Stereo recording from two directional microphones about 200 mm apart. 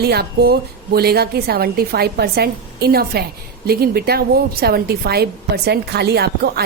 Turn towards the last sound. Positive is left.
turn(degrees=-55)  # may be behind; listen again after turning